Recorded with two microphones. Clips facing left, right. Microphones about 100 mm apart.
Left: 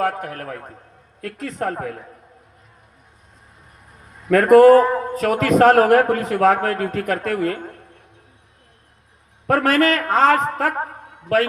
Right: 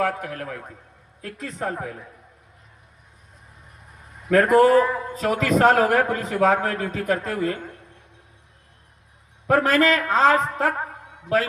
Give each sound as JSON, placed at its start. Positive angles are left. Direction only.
{"t": 0.0, "sound": "a man's voice", "side_deg": 45}
{"t": 1.2, "sound": "a man's voice", "side_deg": 65}
{"t": 1.7, "sound": "a man's voice", "side_deg": 50}
{"t": 4.4, "sound": "a man's voice", "side_deg": 60}
{"t": 4.8, "sound": "a man's voice", "side_deg": 45}
{"t": 5.1, "sound": "a man's voice", "side_deg": 60}
{"t": 9.5, "sound": "a man's voice", "side_deg": 60}